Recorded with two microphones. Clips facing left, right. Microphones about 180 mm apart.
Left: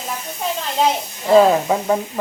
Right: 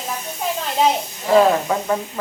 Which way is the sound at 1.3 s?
15° left (ahead or behind).